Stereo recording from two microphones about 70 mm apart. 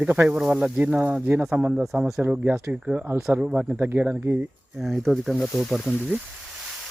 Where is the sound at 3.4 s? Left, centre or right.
Centre; by 4.5 s right.